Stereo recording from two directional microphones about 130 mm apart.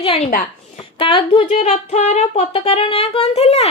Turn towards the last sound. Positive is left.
turn(degrees=55)  # may be behind; listen again after turning